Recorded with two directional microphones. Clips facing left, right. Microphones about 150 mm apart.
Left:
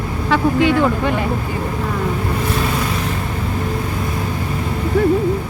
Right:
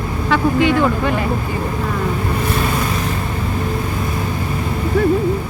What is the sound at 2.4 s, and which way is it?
Vehicle, 55° right (ahead or behind).